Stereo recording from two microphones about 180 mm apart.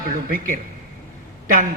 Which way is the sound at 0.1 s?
50° right (ahead or behind).